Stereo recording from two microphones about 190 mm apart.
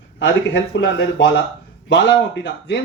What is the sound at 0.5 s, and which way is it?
Speech, 60° left (ahead or behind).